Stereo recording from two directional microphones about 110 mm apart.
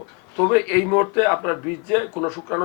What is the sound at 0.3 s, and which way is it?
A man's voice, 15° left (ahead or behind).